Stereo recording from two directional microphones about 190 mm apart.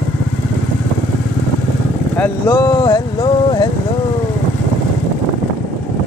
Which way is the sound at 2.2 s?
15° left (ahead or behind).